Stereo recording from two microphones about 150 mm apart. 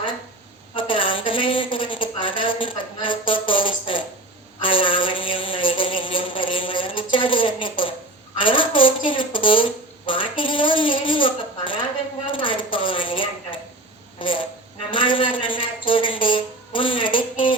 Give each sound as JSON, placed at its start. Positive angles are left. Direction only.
{"t": 0.8, "sound": "speech", "side_deg": 35}